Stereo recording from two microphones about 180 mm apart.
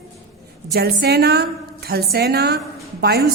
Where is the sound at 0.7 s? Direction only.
65° right (ahead or behind).